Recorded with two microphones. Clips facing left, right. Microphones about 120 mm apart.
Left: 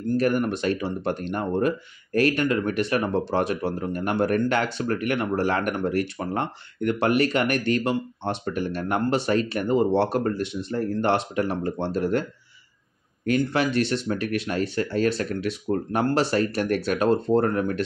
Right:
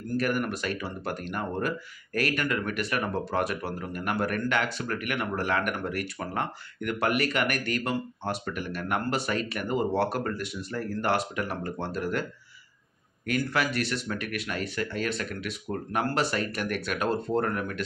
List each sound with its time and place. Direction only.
0.2 s speech: 30° left (ahead or behind)
13.4 s speech: 25° left (ahead or behind)